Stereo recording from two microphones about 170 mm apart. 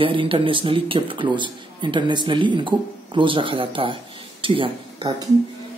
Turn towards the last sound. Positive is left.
turn(degrees=-30)  # may be behind; listen again after turning